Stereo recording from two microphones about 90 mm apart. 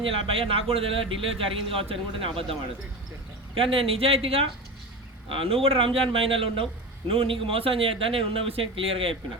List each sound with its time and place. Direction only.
0.0 s speech: 90° right